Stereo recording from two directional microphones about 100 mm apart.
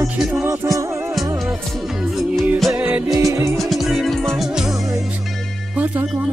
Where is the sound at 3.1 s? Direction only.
35° right (ahead or behind).